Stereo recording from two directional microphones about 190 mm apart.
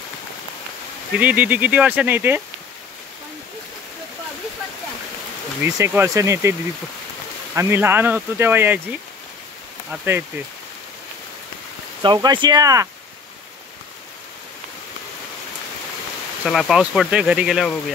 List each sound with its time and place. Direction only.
1.1 s speech: 10° right (ahead or behind)
5.6 s speech: 10° right (ahead or behind)
7.5 s speech: 15° right (ahead or behind)
9.8 s speech: 10° right (ahead or behind)
12.0 s speech: 25° right (ahead or behind)
16.4 s speech: centre (ahead or behind)